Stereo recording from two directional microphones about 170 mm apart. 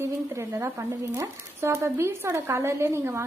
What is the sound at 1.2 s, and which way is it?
Speech, 15° right (ahead or behind).